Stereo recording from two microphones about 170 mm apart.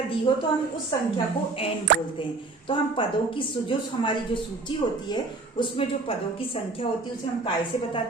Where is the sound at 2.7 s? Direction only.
30° left (ahead or behind).